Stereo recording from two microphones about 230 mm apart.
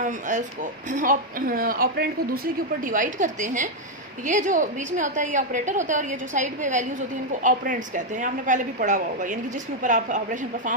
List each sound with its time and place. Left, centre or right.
0.0 s speech: right